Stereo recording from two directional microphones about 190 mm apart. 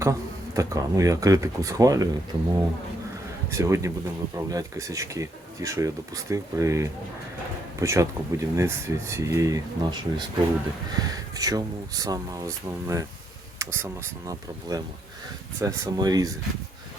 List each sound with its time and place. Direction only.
0.0 s speech: 15° right (ahead or behind)
3.5 s speech: 15° right (ahead or behind)